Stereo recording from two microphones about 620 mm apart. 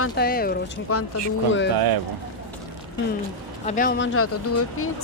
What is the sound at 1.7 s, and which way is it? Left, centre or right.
Speech, right.